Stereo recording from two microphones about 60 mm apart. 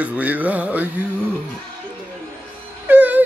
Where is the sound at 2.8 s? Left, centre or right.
Right.